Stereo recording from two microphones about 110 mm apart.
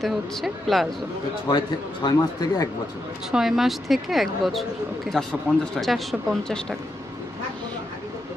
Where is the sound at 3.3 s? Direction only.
5° right (ahead or behind).